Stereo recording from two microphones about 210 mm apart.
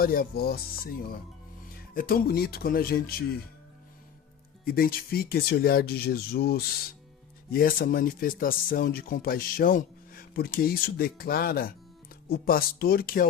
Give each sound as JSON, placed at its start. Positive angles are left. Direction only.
{"t": 0.0, "sound": "speech", "side_deg": 45}
{"t": 4.6, "sound": "speech", "side_deg": 45}